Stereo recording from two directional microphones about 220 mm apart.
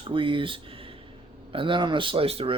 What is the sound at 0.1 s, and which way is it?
Speech, 25° right (ahead or behind).